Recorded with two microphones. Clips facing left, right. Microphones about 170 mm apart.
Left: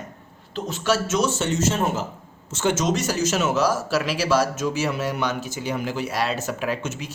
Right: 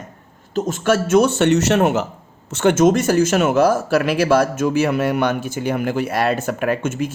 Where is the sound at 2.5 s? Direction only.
60° right (ahead or behind).